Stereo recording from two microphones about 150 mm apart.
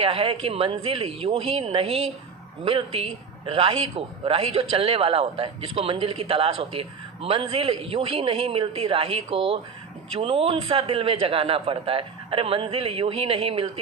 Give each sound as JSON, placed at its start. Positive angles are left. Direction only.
{"t": 0.0, "sound": "speech", "side_deg": -40}